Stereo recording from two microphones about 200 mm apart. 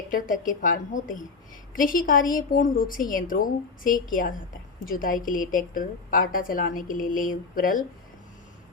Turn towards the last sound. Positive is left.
turn(degrees=45)  # may be behind; listen again after turning